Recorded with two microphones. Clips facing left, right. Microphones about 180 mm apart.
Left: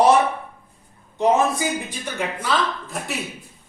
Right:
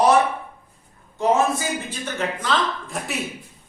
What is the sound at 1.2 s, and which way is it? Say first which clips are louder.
Speech: left 1 dB; 15° left (ahead or behind).